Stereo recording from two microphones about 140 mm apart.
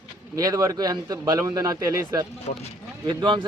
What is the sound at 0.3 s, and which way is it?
Speech, 25° right (ahead or behind).